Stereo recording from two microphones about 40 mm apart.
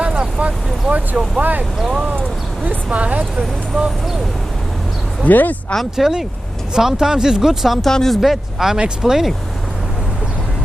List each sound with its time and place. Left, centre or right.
0.0 s vehicle: right
1.4 s speech: right
1.8 s speech: centre
2.6 s speech: right
3.3 s speech: centre
5.2 s speech: left
6.0 s speech: centre
6.7 s speech: centre
7.8 s speech: centre
8.1 s speech: centre